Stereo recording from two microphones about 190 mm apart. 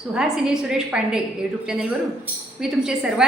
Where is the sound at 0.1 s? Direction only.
5° right (ahead or behind).